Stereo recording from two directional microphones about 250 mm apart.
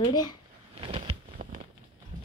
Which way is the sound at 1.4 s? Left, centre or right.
Right.